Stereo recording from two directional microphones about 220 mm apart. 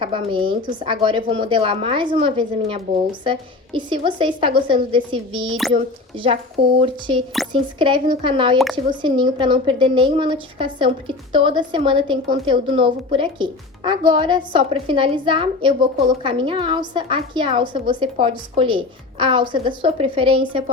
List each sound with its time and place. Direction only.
0.0 s a woman's voice: 25° right (ahead or behind)